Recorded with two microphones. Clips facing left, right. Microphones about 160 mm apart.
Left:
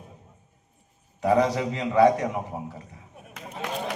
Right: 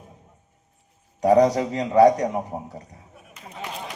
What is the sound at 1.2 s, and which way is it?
A man's voice, 40° right (ahead or behind).